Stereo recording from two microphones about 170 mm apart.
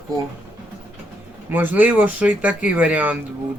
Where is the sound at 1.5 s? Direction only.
10° right (ahead or behind).